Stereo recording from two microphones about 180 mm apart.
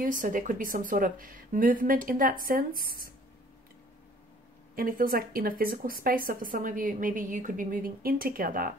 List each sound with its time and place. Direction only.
0.0 s a woman's voice: 45° right (ahead or behind)
4.7 s a woman's voice: 50° right (ahead or behind)